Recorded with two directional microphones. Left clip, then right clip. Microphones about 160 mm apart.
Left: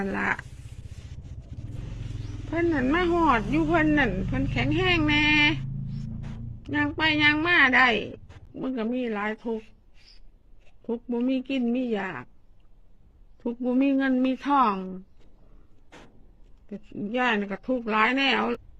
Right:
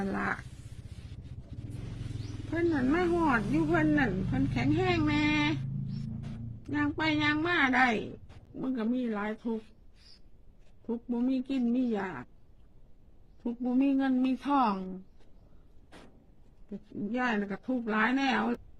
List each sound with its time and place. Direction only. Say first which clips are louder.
0.0 s speech: left 6 dB; 15° right (ahead or behind)
2.5 s speech: left 4 dB; 5° right (ahead or behind)
6.6 s speech: left 6 dB; 10° right (ahead or behind)
10.8 s speech: left 5 dB; 15° right (ahead or behind)
13.7 s speech: left 5 dB; 10° right (ahead or behind)
16.6 s speech: left 3 dB; centre (ahead or behind)